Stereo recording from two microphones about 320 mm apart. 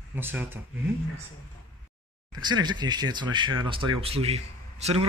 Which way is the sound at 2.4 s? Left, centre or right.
Centre.